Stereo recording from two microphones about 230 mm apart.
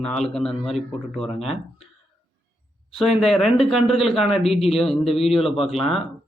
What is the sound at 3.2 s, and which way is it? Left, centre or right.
A man's voice, centre.